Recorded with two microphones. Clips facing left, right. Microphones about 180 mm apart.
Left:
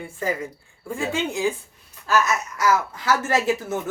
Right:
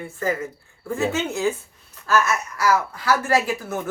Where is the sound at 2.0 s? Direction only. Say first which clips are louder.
Even; 20° left (ahead or behind).